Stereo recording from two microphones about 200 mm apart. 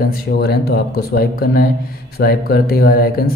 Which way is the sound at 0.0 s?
50° left (ahead or behind).